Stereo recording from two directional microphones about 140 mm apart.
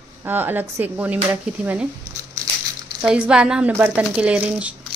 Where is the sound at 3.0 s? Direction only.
5° right (ahead or behind).